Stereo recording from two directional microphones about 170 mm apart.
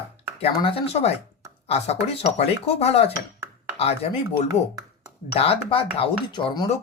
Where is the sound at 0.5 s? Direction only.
30° left (ahead or behind).